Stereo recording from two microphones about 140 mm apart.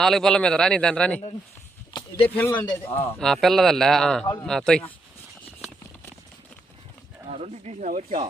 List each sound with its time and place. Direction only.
0.0 s speech: 5° left (ahead or behind)
1.9 s a sound: 30° left (ahead or behind)
2.2 s speech: 15° left (ahead or behind)
3.2 s speech: centre (ahead or behind)
7.3 s speech: 50° right (ahead or behind)
7.9 s speech: 65° right (ahead or behind)